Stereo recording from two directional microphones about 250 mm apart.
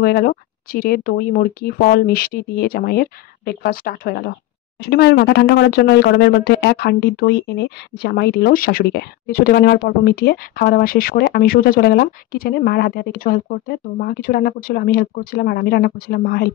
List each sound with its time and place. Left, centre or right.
0.0 s speech: left